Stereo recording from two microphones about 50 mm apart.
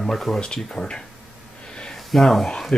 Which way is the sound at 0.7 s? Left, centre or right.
Centre.